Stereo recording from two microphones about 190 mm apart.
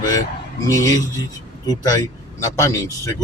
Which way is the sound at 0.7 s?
15° left (ahead or behind).